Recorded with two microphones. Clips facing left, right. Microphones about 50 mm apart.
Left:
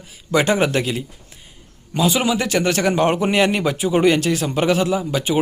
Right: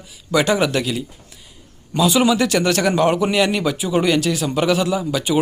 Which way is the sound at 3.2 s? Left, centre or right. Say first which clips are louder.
Even; left.